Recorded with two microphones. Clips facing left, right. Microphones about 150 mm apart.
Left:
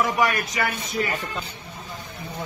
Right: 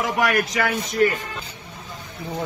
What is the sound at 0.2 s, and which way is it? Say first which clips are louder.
Speech: right 2 dB; 70° right (ahead or behind).